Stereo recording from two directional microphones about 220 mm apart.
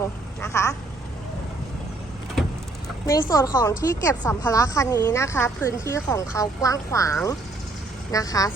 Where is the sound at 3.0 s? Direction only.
15° left (ahead or behind).